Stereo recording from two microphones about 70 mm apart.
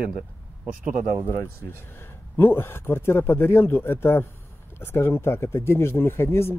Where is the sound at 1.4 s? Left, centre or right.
Left.